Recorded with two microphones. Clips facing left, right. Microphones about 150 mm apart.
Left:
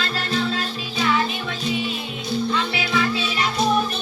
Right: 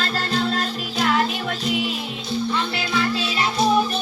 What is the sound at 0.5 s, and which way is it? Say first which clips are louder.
Music: right 2 dB; 45° right (ahead or behind).